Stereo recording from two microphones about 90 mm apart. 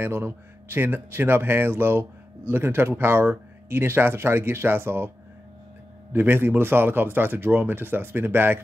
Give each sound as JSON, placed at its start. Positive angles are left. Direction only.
{"t": 0.0, "sound": "speech", "side_deg": -25}
{"t": 6.1, "sound": "speech", "side_deg": -25}